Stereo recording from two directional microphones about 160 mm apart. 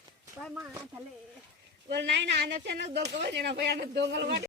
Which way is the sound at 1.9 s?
90° right.